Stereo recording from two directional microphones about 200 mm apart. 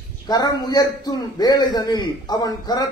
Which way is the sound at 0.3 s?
20° left (ahead or behind).